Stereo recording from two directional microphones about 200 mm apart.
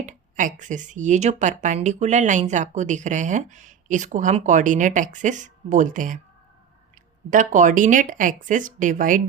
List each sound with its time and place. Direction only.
0.0 s speech: 40° right (ahead or behind)
7.3 s speech: 40° right (ahead or behind)